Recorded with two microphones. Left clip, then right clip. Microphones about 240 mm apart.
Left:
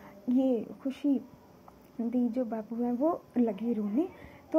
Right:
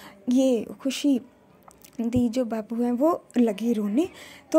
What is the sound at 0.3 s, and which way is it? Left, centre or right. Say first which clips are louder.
Speech: right 6 dB; right.